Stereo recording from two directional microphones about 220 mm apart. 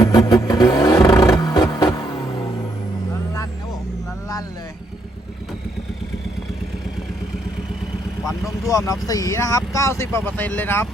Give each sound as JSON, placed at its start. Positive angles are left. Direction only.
{"t": 0.0, "sound": "vehicle", "side_deg": 15}
{"t": 8.6, "sound": "speech", "side_deg": 15}